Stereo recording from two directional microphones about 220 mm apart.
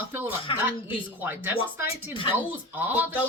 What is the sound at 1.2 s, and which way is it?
Speech, 10° right (ahead or behind).